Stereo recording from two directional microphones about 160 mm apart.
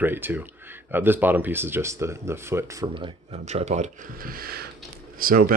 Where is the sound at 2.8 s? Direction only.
30° right (ahead or behind).